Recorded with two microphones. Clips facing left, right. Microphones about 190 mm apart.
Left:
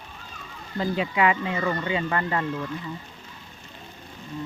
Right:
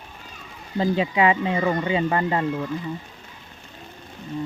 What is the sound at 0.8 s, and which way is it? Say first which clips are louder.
Speech: right 3 dB; 20° right (ahead or behind).